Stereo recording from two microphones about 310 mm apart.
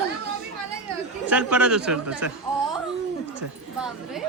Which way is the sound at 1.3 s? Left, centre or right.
Centre.